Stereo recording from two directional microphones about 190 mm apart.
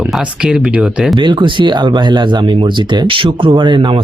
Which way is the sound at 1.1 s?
25° right (ahead or behind).